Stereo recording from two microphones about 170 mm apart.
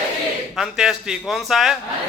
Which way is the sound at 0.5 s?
5° right (ahead or behind).